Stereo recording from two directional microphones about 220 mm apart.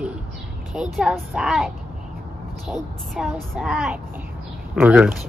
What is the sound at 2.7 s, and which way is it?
Speech, centre (ahead or behind).